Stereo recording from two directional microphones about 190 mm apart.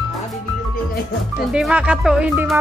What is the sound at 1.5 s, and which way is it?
Speech, 5° right (ahead or behind).